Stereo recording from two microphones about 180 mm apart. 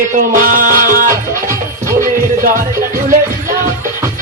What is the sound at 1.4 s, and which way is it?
Music, 15° right (ahead or behind).